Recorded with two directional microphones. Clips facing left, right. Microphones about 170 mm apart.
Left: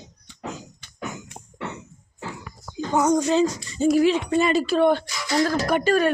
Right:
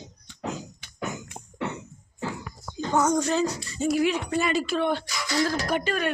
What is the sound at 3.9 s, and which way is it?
Speech, 30° left (ahead or behind).